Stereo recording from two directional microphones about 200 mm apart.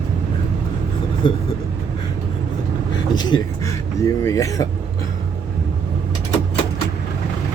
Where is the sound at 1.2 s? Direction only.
25° left (ahead or behind).